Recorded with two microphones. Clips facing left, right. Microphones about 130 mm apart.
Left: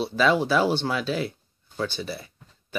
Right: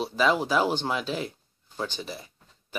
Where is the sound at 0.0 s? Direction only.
15° right (ahead or behind).